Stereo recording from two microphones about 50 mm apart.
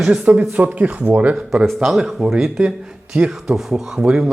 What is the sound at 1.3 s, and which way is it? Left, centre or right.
Speech, centre.